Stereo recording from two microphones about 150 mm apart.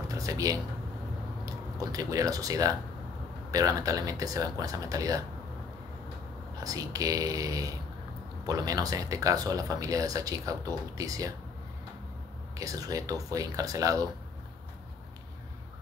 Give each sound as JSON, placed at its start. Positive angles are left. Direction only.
{"t": 0.1, "sound": "speech", "side_deg": -25}
{"t": 6.6, "sound": "speech", "side_deg": -25}
{"t": 12.5, "sound": "speech", "side_deg": -25}